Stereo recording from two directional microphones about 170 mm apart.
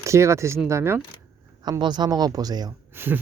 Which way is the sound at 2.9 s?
10° right (ahead or behind).